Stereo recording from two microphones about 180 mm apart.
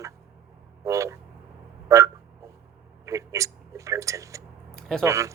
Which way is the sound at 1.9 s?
15° right (ahead or behind).